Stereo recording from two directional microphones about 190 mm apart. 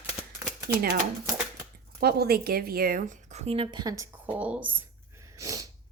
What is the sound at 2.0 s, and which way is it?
Speech, 55° right (ahead or behind).